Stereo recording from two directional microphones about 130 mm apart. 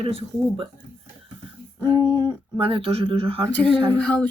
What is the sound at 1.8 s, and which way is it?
Speech, 30° right (ahead or behind).